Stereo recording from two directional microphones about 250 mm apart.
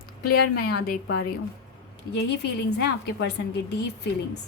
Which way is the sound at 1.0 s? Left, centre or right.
Left.